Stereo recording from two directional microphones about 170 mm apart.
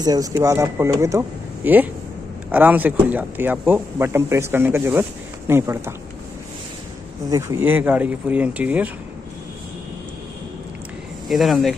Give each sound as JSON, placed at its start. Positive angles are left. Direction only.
{"t": 0.0, "sound": "speech", "side_deg": -20}
{"t": 7.2, "sound": "speech", "side_deg": -15}
{"t": 11.2, "sound": "speech", "side_deg": 0}